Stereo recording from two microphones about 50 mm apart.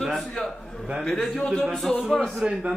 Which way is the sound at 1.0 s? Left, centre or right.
Centre.